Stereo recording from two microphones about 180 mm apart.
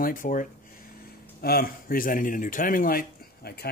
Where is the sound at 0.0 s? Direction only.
50° left (ahead or behind).